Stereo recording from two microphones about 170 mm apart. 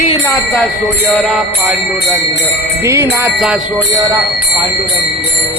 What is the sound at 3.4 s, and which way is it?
Jingle bell, 5° right (ahead or behind).